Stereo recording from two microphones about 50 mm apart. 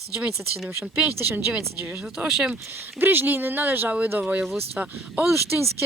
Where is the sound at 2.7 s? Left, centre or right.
Right.